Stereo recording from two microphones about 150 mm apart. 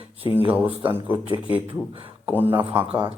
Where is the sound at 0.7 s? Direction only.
35° right (ahead or behind).